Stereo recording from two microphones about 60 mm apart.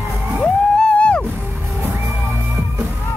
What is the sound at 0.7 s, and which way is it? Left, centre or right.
Music, centre.